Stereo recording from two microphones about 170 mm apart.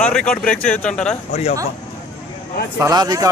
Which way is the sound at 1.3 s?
40° left (ahead or behind).